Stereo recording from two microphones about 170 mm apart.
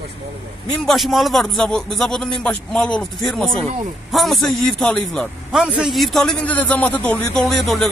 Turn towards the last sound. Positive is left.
turn(degrees=0)  # may be behind; listen again after turning